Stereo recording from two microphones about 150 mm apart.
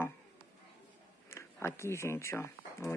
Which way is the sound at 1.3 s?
15° left (ahead or behind).